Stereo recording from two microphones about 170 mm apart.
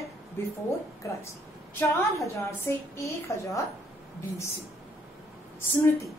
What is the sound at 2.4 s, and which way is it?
Speech, 15° left (ahead or behind).